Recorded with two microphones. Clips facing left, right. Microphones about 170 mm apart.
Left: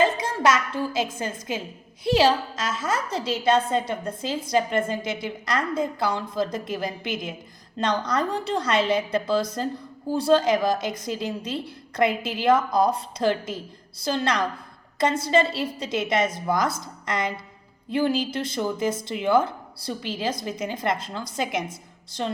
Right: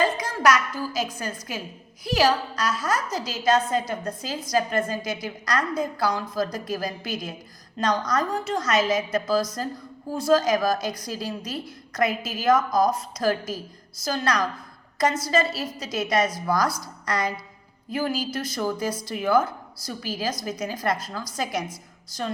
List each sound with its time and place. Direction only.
0.0 s a woman's voice: 25° left (ahead or behind)